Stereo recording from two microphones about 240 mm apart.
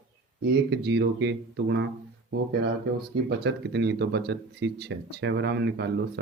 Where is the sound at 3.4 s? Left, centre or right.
Right.